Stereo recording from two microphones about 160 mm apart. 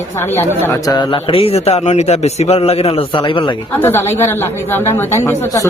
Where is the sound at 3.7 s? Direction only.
15° left (ahead or behind).